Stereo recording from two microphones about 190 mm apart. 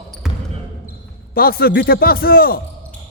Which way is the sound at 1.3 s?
50° left (ahead or behind).